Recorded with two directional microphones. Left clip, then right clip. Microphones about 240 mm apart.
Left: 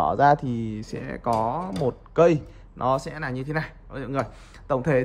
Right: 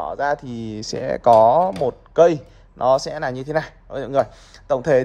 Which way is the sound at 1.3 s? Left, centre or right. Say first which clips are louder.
Right 13 dB; left.